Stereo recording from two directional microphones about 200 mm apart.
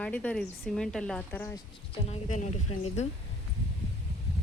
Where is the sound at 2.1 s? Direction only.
40° left (ahead or behind).